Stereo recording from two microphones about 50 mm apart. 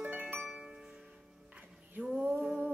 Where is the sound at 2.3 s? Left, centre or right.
Centre.